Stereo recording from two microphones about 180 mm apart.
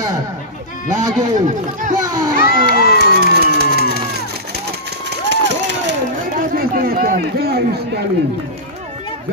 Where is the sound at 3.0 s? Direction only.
65° right (ahead or behind).